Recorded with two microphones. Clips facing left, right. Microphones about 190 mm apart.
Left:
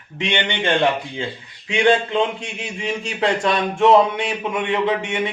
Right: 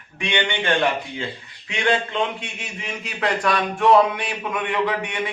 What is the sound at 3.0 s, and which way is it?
Speech, 25° left (ahead or behind).